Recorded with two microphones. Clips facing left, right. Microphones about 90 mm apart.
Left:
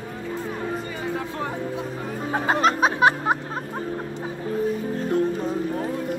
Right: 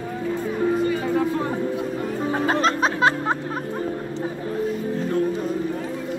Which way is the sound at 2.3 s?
15° left (ahead or behind).